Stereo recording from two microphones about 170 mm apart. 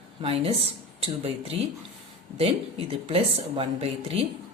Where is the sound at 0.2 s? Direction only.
35° right (ahead or behind).